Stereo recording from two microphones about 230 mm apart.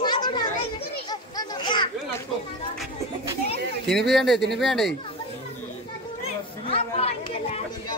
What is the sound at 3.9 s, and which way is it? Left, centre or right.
Speech, centre.